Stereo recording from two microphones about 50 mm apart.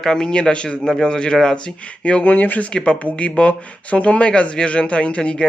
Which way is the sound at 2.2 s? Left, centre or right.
Left.